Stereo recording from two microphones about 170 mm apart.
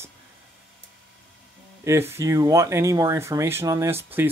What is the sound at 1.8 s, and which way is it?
Speech, 15° right (ahead or behind).